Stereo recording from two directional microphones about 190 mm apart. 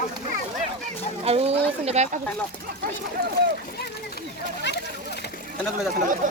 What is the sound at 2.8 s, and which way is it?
Speech, 55° right (ahead or behind).